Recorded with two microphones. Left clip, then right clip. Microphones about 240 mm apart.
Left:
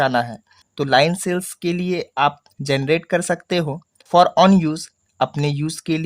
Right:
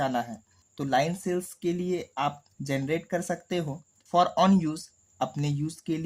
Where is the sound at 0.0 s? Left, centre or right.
Left.